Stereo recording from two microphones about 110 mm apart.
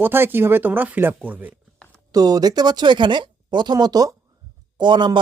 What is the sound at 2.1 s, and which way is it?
Speech, 35° right (ahead or behind).